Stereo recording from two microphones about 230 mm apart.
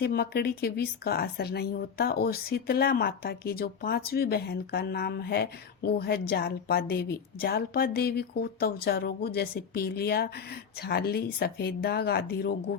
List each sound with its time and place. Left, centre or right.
0.0 s speech: left